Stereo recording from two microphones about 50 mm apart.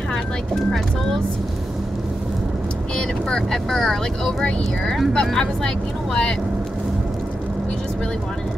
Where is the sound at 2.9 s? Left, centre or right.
Centre.